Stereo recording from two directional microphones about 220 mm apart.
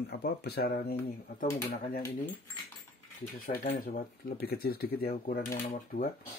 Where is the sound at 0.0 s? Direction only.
45° left (ahead or behind).